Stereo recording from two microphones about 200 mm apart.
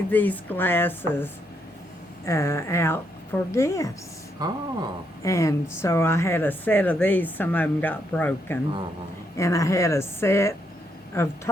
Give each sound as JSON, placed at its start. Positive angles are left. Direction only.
{"t": 0.1, "sound": "speech", "side_deg": 10}
{"t": 4.4, "sound": "speech", "side_deg": -20}
{"t": 5.2, "sound": "speech", "side_deg": 15}